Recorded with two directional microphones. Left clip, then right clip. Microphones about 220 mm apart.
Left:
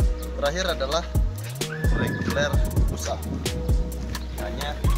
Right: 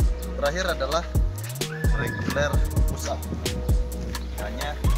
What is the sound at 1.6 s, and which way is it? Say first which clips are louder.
Music: left 1 dB; centre (ahead or behind).